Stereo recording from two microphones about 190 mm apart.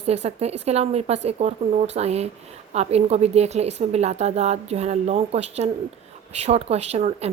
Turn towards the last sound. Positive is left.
turn(degrees=-35)  # may be behind; listen again after turning